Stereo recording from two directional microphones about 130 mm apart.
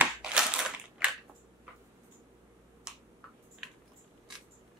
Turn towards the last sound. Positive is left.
turn(degrees=-5)  # may be behind; listen again after turning